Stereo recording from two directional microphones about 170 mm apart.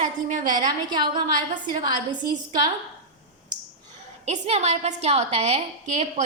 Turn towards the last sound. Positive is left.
turn(degrees=-40)  # may be behind; listen again after turning